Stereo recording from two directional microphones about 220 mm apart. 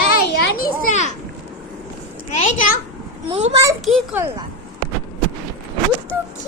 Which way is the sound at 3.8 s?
Centre (ahead or behind).